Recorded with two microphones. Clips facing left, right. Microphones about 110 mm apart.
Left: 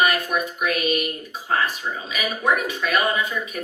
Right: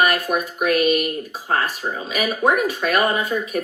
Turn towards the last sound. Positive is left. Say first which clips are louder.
# right 4 dB
turn(degrees=-40)  # may be behind; listen again after turning